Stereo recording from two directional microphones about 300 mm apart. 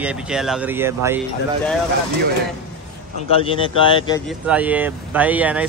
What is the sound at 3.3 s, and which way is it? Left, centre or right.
Speech, centre.